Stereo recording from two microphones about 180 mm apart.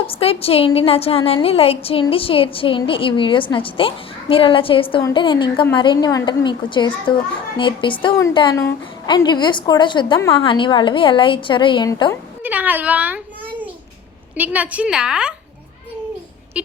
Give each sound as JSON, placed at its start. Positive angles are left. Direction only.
{"t": 0.1, "sound": "a woman's voice", "side_deg": 30}
{"t": 12.4, "sound": "a sound", "side_deg": -10}
{"t": 14.3, "sound": "a woman's voice", "side_deg": -10}